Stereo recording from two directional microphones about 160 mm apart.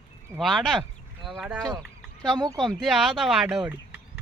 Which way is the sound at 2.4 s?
25° right (ahead or behind).